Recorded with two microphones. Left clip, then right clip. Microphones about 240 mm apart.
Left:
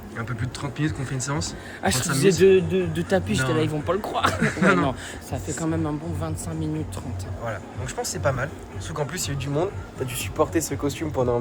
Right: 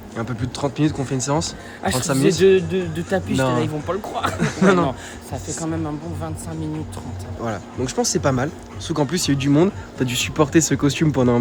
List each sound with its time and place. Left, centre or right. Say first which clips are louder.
0.2 s speech: right 7 dB; centre
1.8 s a man's voice: right 2 dB; centre
2.0 s a man's voice: right 2 dB; centre
4.4 s a man's voice: right 3 dB; centre
7.4 s speech: right 6 dB; right
10.1 s speech: right 5 dB; right